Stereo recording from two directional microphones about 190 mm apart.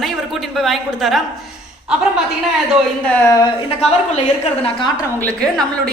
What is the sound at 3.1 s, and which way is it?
Speech, 15° left (ahead or behind).